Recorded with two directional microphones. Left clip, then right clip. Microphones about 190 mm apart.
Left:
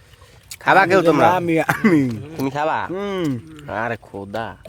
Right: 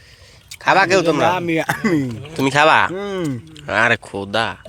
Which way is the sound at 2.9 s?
10° left (ahead or behind).